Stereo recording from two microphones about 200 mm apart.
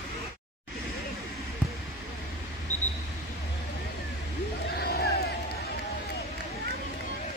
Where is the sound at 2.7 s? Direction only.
35° left (ahead or behind).